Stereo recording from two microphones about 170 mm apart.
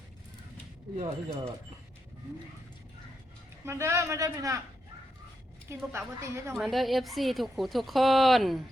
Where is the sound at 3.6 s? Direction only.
15° right (ahead or behind).